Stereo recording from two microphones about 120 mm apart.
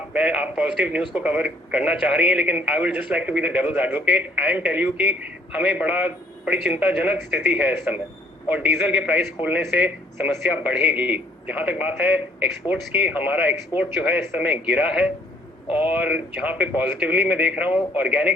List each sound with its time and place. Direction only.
0.1 s speech: 10° right (ahead or behind)
15.6 s speech: 50° left (ahead or behind)
15.9 s speech: 10° right (ahead or behind)